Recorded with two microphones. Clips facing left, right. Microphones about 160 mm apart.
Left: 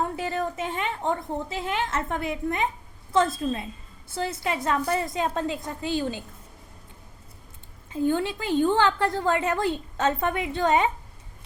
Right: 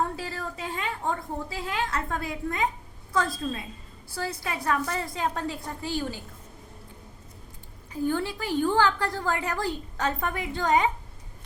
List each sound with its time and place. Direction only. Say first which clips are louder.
0.2 s a woman's voice: left 6 dB; 20° left (ahead or behind)
7.9 s a woman's voice: left 3 dB; 20° left (ahead or behind)